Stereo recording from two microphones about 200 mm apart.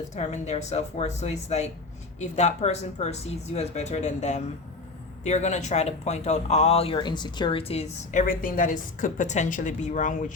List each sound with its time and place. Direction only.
0.1 s speech: 35° left (ahead or behind)